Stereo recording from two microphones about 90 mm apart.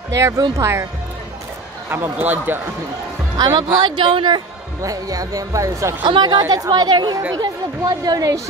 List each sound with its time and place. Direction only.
0.6 s speech: 30° right (ahead or behind)
1.9 s speech: 20° right (ahead or behind)
3.3 s speech: 50° right (ahead or behind)
4.8 s speech: 40° right (ahead or behind)
6.0 s a woman's voice: 55° right (ahead or behind)
7.9 s a woman's voice: 45° right (ahead or behind)